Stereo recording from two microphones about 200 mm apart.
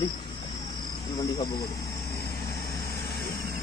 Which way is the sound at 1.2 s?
20° left (ahead or behind).